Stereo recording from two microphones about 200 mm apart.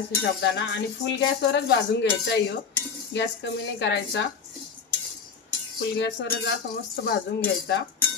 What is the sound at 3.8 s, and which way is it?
Cutlery, 60° left (ahead or behind).